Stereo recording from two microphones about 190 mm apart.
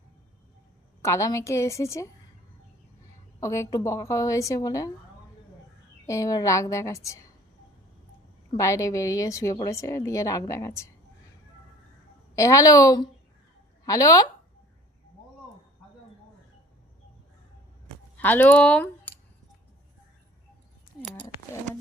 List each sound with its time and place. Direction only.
1.0 s a woman's voice: 15° left (ahead or behind)
3.4 s a woman's voice: 15° left (ahead or behind)
6.1 s a woman's voice: 15° left (ahead or behind)
8.4 s a woman's voice: 15° left (ahead or behind)
12.4 s a woman's voice: 15° left (ahead or behind)
18.2 s speech: 10° left (ahead or behind)